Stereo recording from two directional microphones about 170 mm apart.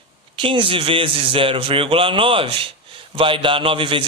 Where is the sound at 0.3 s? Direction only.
30° right (ahead or behind).